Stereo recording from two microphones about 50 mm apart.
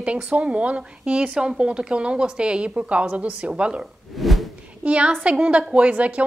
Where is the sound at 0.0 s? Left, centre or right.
Right.